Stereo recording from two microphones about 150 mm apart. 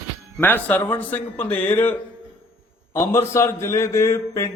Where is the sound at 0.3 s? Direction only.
10° left (ahead or behind).